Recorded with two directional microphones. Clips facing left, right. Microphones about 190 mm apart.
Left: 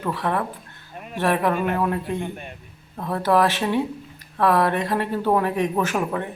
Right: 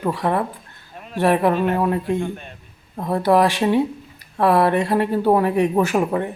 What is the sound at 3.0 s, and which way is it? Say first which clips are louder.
Speech: right 3 dB; 15° right (ahead or behind).